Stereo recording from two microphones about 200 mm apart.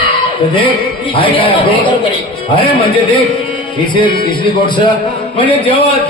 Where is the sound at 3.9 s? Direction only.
25° left (ahead or behind).